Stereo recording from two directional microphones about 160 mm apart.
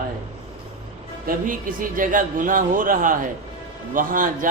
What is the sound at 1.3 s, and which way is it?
A man's voice, 60° right (ahead or behind).